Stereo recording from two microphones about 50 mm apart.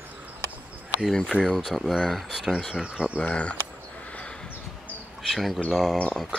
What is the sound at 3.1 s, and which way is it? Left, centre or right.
Speech, left.